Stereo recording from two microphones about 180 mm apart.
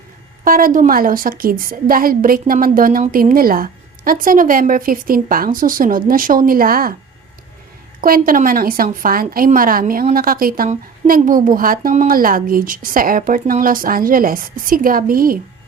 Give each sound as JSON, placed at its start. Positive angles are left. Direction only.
{"t": 0.4, "sound": "a woman's voice", "side_deg": -50}
{"t": 8.0, "sound": "a woman's voice", "side_deg": -50}